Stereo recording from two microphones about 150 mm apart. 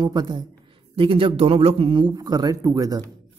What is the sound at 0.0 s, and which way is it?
A man's voice, 30° right (ahead or behind).